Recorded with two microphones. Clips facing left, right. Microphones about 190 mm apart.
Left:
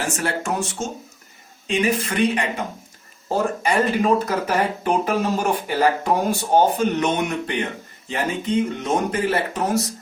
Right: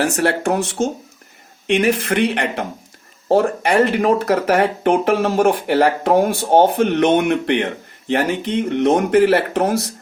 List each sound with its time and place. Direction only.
0.0 s speech: 65° right (ahead or behind)